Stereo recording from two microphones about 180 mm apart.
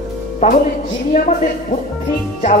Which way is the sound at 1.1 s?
45° left (ahead or behind).